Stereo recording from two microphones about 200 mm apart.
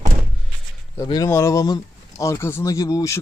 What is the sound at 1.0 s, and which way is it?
Speech, 15° left (ahead or behind).